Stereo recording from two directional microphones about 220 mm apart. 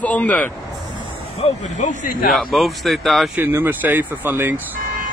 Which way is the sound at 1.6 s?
35° left (ahead or behind).